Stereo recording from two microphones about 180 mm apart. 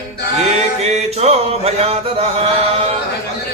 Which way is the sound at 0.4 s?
35° right (ahead or behind).